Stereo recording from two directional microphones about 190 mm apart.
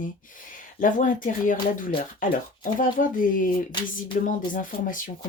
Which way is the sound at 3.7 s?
25° left (ahead or behind).